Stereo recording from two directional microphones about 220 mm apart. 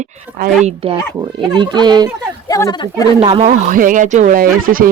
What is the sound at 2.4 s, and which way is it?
Speech, 15° left (ahead or behind).